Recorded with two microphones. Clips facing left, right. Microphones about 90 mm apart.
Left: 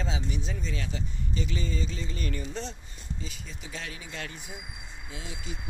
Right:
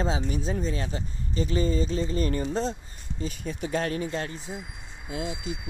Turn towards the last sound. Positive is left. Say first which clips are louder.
# right 8 dB
turn(degrees=-35)  # may be behind; listen again after turning